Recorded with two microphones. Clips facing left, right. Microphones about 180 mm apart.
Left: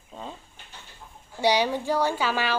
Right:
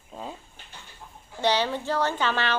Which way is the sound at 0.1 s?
5° right (ahead or behind).